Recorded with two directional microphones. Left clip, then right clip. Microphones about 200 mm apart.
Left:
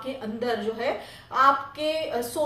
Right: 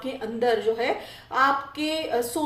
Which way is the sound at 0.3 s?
35° right (ahead or behind).